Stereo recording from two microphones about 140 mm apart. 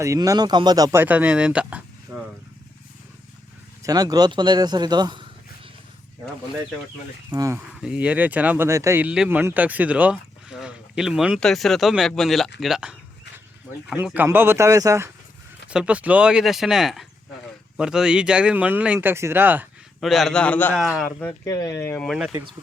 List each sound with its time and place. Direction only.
0.0 s speech: 25° right (ahead or behind); by 1.8 s 10° right (ahead or behind)
2.1 s vehicle: 15° right (ahead or behind)
3.8 s speech: 25° right (ahead or behind)
7.3 s speech: 25° right (ahead or behind)
7.8 s speech: 10° right (ahead or behind)
15.7 s speech: 10° right (ahead or behind)
20.0 s speech: centre (ahead or behind)
21.4 s speech: 25° left (ahead or behind)
22.0 s speech: 5° right (ahead or behind)